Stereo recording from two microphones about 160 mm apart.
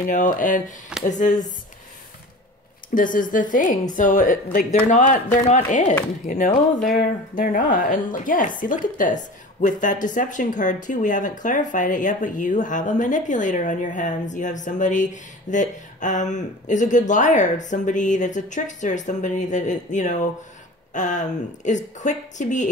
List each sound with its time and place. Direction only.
0.0 s a woman's voice: 55° left (ahead or behind)
2.9 s a woman's voice: 55° left (ahead or behind)